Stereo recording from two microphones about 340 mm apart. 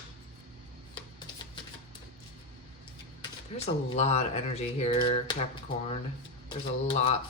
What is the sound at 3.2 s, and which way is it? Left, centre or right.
Speech, centre.